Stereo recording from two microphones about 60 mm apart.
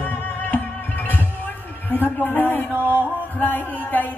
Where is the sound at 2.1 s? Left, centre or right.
Left.